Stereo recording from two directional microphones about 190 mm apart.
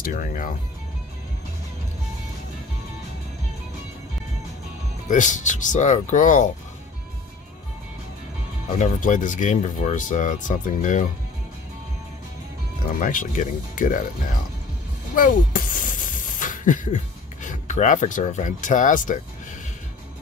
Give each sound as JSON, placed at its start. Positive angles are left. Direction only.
{"t": 0.0, "sound": "speech", "side_deg": 45}
{"t": 5.0, "sound": "speech", "side_deg": 40}
{"t": 8.6, "sound": "speech", "side_deg": 40}
{"t": 13.0, "sound": "speech", "side_deg": 45}
{"t": 15.1, "sound": "a sound", "side_deg": 45}